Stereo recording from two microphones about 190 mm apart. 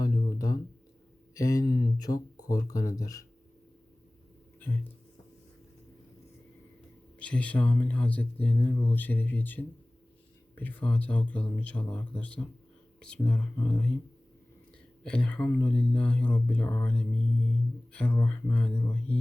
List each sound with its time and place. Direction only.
0.0 s a sound: 20° left (ahead or behind)
1.3 s speech: 15° left (ahead or behind)
7.2 s speech: 5° left (ahead or behind)
15.0 s speech: 5° left (ahead or behind)